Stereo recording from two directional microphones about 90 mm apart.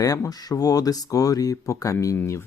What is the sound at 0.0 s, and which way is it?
Speech, 40° left (ahead or behind).